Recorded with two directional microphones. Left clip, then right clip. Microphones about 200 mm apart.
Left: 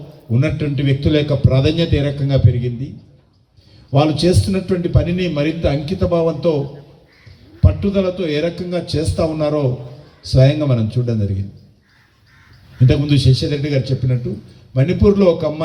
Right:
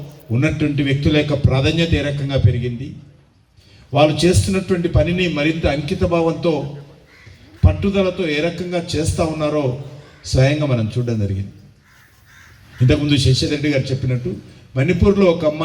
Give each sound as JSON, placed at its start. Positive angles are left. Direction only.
{"t": 0.3, "sound": "a man's voice", "side_deg": 60}
{"t": 3.9, "sound": "a man's voice", "side_deg": 60}
{"t": 7.6, "sound": "a man's voice", "side_deg": 60}
{"t": 12.9, "sound": "a man's voice", "side_deg": 60}